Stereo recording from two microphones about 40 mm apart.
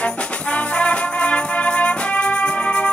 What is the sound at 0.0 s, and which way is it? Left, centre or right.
Music, left.